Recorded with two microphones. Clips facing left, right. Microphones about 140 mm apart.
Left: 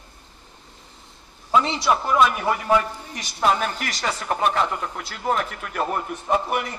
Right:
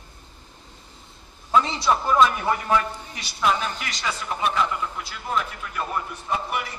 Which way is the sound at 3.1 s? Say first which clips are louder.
Left 2 dB; 45° left (ahead or behind).